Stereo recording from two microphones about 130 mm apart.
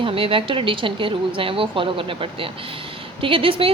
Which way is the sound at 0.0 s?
45° right (ahead or behind).